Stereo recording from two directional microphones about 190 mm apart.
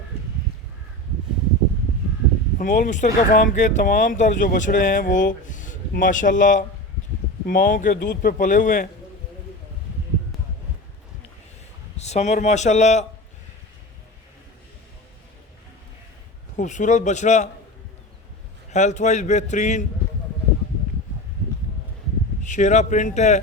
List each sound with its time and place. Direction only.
2.6 s speech: 45° left (ahead or behind)
11.9 s a man's voice: 35° left (ahead or behind)
16.6 s a man's voice: 40° left (ahead or behind)
18.7 s a man's voice: 40° left (ahead or behind)
22.4 s a man's voice: 40° left (ahead or behind)